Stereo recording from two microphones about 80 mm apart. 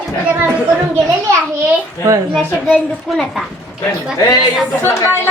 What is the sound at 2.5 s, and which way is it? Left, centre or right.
Speech, left.